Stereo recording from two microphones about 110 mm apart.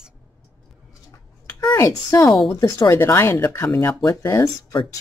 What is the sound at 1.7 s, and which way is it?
Speech, 30° left (ahead or behind).